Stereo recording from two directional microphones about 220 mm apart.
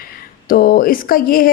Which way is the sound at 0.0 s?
40° left (ahead or behind).